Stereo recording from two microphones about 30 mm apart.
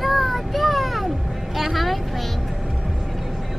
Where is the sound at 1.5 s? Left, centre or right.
Centre.